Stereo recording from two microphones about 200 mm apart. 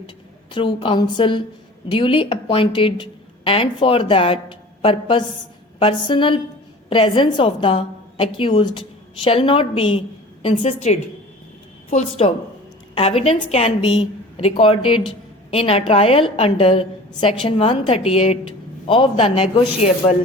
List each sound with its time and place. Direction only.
0.5 s a woman's voice: 25° left (ahead or behind)